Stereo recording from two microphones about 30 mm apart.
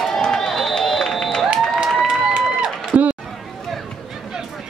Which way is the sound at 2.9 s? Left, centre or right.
Right.